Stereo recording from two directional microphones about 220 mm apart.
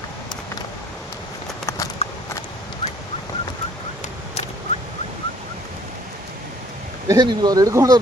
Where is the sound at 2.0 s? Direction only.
30° left (ahead or behind).